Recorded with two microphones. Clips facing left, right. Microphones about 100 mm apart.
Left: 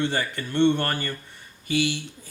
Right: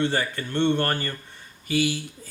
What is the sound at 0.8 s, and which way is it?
Speech, 40° right (ahead or behind).